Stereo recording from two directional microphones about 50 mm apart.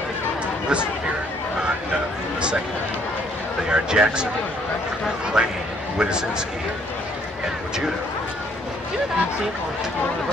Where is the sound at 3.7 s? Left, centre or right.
Centre.